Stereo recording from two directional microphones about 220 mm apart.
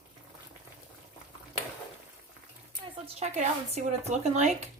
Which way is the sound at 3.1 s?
30° right (ahead or behind).